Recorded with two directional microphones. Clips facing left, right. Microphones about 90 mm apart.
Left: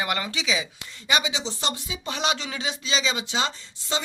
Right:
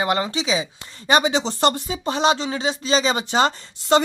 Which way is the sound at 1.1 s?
45° right (ahead or behind).